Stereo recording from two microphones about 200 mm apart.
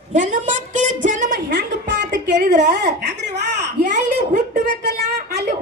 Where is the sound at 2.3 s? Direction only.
55° right (ahead or behind).